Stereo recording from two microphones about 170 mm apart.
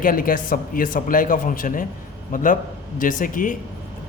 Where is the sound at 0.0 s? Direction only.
55° left (ahead or behind).